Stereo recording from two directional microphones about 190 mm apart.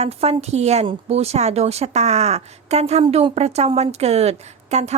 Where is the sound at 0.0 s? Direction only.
35° right (ahead or behind).